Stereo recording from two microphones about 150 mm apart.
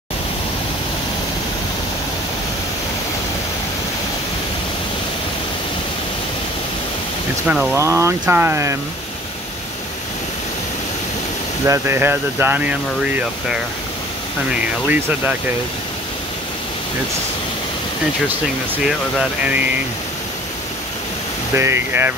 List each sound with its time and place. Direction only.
7.4 s speech: 5° right (ahead or behind)
7.7 s speech: 20° right (ahead or behind)
11.6 s speech: 15° right (ahead or behind)
18.9 s speech: 5° right (ahead or behind)
21.5 s speech: 15° right (ahead or behind)